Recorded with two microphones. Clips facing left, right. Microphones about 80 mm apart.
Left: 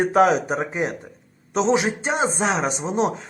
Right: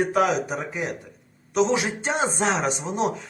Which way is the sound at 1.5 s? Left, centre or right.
Left.